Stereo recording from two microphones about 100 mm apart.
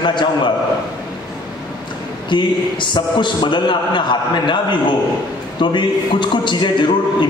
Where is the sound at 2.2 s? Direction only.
50° left (ahead or behind).